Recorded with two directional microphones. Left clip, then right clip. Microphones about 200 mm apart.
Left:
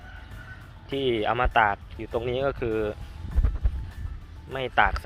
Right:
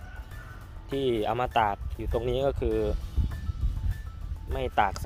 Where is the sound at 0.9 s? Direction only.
15° right (ahead or behind).